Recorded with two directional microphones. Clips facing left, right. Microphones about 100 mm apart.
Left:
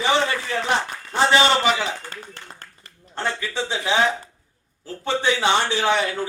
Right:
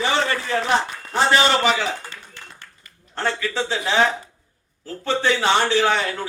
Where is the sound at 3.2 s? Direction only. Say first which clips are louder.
Right 2 dB; 15° left (ahead or behind).